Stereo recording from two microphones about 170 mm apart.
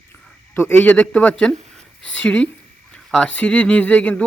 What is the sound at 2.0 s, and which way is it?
Speech, 90° left.